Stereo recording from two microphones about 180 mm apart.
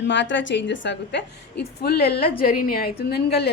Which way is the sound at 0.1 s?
90° left.